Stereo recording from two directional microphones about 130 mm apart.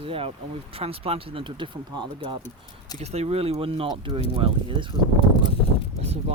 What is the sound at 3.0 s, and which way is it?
Speech, 55° right (ahead or behind).